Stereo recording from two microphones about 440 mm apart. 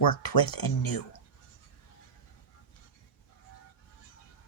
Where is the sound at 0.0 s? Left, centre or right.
Left.